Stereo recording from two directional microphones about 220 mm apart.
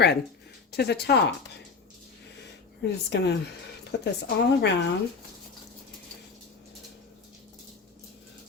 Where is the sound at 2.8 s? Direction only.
50° left (ahead or behind).